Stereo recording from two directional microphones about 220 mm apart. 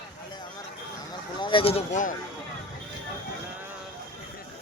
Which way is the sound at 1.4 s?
20° left (ahead or behind).